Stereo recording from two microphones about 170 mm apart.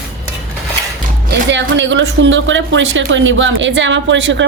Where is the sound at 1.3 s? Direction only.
90° right.